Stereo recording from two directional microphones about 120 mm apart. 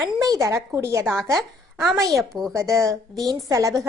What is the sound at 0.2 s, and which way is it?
A woman's voice, 25° right (ahead or behind).